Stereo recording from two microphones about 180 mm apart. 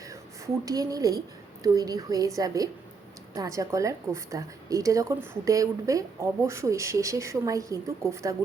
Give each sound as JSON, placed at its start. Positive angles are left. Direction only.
{"t": 0.1, "sound": "a woman's voice", "side_deg": -20}